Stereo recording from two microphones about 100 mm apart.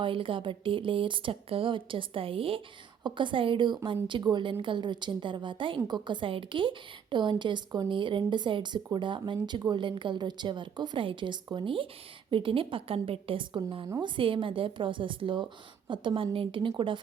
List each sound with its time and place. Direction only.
0.0 s speech: 60° right (ahead or behind)
3.0 s a woman's voice: 55° right (ahead or behind)